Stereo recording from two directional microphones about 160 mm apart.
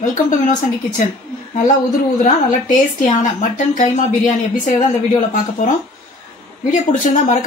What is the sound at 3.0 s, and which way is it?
Speech, 50° left (ahead or behind).